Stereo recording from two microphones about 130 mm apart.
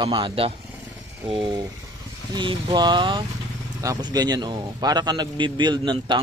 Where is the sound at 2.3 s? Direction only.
35° right (ahead or behind).